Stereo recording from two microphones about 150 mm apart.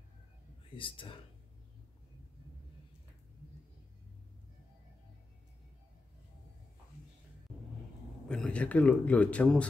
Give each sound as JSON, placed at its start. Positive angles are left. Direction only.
{"t": 0.7, "sound": "speech", "side_deg": 35}
{"t": 8.3, "sound": "speech", "side_deg": 5}